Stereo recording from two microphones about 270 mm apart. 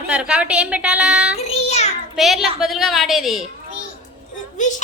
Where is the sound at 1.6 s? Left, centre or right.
Left.